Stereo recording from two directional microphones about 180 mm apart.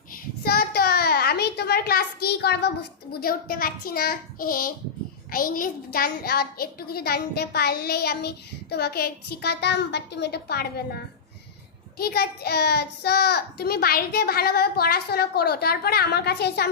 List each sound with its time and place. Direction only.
0.4 s a child's voice: 60° left (ahead or behind)
11.9 s a woman's voice: 60° left (ahead or behind)